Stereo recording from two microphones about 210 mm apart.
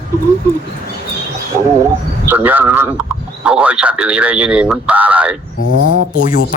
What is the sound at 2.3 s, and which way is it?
A man's voice, 10° right (ahead or behind).